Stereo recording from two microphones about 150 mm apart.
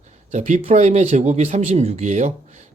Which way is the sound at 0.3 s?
50° right (ahead or behind).